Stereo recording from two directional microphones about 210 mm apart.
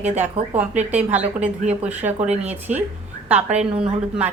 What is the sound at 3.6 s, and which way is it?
Speech, 5° right (ahead or behind).